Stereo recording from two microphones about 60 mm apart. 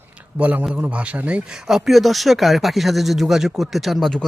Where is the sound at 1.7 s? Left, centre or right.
Centre.